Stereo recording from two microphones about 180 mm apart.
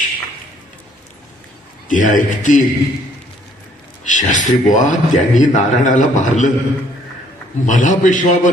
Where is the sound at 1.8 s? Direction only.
45° left (ahead or behind).